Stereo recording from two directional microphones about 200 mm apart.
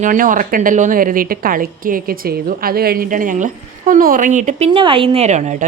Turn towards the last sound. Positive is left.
turn(degrees=-35)  # may be behind; listen again after turning